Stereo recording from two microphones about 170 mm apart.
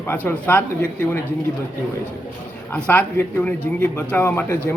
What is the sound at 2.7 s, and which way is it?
Speech, 10° left (ahead or behind).